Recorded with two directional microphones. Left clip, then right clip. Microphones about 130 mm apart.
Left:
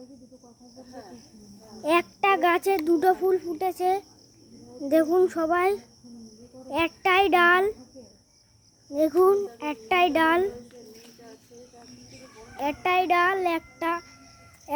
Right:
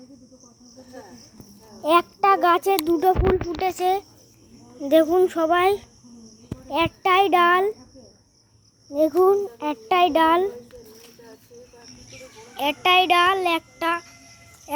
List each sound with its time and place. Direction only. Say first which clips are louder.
1.8 s a sound: right 5 dB; 10° right (ahead or behind)
2.9 s a child's voice: right 1 dB; centre (ahead or behind)
8.9 s a child's voice: right 3 dB; 5° right (ahead or behind)
9.6 s a child's voice: right 4 dB; 20° right (ahead or behind)
10.0 s a child's voice: right 4 dB; 5° right (ahead or behind)
12.5 s a child's voice: right 6 dB; 15° right (ahead or behind)